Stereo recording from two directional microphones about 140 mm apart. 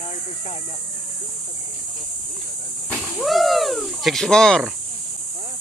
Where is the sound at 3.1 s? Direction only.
Centre (ahead or behind).